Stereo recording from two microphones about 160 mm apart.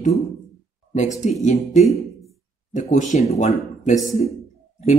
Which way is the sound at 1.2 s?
45° left (ahead or behind).